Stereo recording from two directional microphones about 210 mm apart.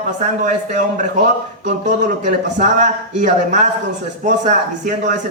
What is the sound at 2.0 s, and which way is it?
A man's voice, 35° right (ahead or behind).